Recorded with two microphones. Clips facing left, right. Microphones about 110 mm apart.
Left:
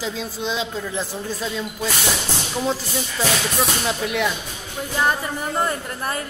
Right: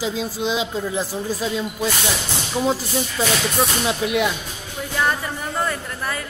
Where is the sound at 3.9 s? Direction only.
10° right (ahead or behind).